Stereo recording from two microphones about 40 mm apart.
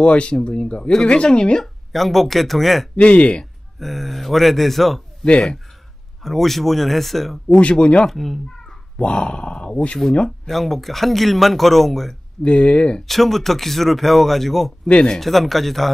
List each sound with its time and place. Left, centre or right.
0.0 s speech: left
1.6 s speech: centre
3.0 s speech: left
3.8 s speech: centre
5.2 s speech: left
6.2 s speech: centre
7.4 s speech: left
8.1 s speech: centre
8.9 s speech: left
10.4 s speech: centre
12.4 s speech: left
13.0 s speech: centre